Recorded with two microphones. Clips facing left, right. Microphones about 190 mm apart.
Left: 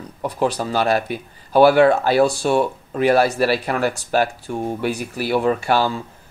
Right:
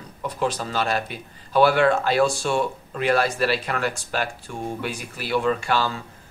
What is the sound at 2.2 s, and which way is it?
Speech, 60° left (ahead or behind).